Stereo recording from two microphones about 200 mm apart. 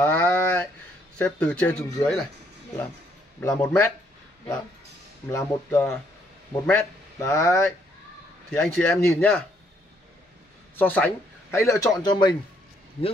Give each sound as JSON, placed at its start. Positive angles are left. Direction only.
{"t": 0.0, "sound": "a sound", "side_deg": 10}
{"t": 1.1, "sound": "speech", "side_deg": 5}
{"t": 3.3, "sound": "speech", "side_deg": 10}
{"t": 5.3, "sound": "speech", "side_deg": 15}
{"t": 8.5, "sound": "speech", "side_deg": 5}
{"t": 10.8, "sound": "speech", "side_deg": 10}